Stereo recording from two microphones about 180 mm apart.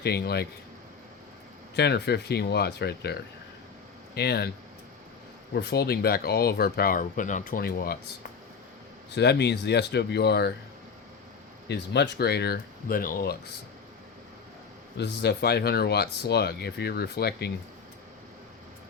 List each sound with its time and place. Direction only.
0.0 s speech: 65° left (ahead or behind)
1.7 s speech: 65° left (ahead or behind)
5.5 s speech: 65° left (ahead or behind)
9.1 s speech: 70° left (ahead or behind)
11.7 s speech: 70° left (ahead or behind); by 13.3 s 50° left (ahead or behind)
14.9 s speech: 70° left (ahead or behind)